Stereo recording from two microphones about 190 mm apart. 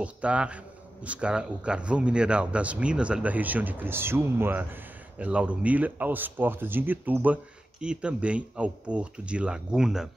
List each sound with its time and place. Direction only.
0.0 s speech: 5° right (ahead or behind)